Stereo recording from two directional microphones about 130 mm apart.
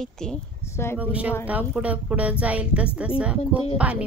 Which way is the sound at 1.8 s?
10° right (ahead or behind).